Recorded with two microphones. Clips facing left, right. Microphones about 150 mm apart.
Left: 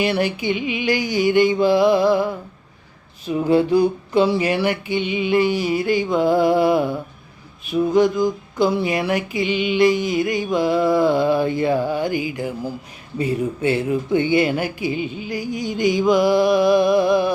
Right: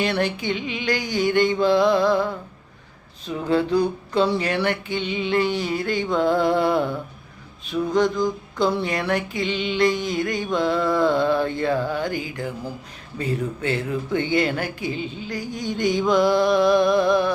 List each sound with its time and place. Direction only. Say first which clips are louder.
0.0 s speech: left 3 dB; 5° left (ahead or behind)